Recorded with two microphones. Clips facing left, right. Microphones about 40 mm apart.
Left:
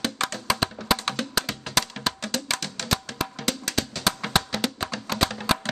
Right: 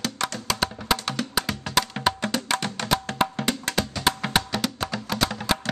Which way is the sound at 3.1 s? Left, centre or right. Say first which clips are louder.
Right 7 dB; right.